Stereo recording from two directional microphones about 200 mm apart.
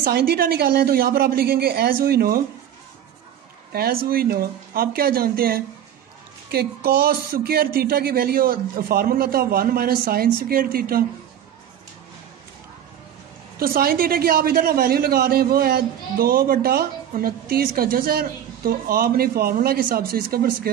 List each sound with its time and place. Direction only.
0.0 s speech: 50° right (ahead or behind)
3.7 s speech: 50° right (ahead or behind)
13.6 s speech: 50° right (ahead or behind)